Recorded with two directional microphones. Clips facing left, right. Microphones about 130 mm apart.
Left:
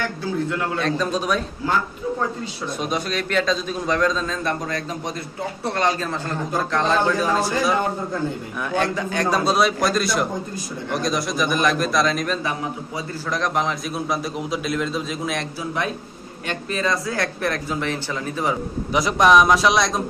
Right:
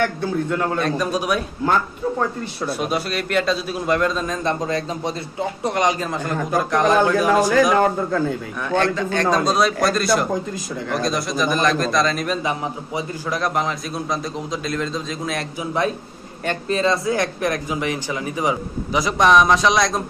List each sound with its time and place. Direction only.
0.7 s a man's voice: 10° right (ahead or behind)
2.8 s a man's voice: 5° right (ahead or behind); by 5.1 s 25° right (ahead or behind)
5.6 s a man's voice: 15° right (ahead or behind)
7.7 s a man's voice: 90° right
8.7 s a man's voice: 15° left (ahead or behind)
16.6 s a man's voice: 30° right (ahead or behind)
18.9 s a man's voice: centre (ahead or behind)